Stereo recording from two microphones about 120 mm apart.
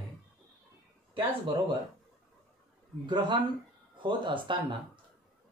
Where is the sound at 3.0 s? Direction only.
40° right (ahead or behind).